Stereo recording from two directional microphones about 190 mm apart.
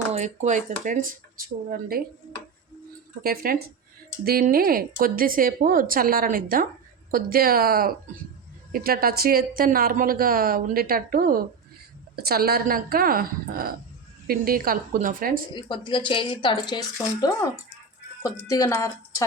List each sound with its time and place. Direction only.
0.1 s a woman's voice: 40° right (ahead or behind)
3.2 s a woman's voice: 50° right (ahead or behind)
15.5 s speech: 25° left (ahead or behind)
18.4 s speech: 15° left (ahead or behind)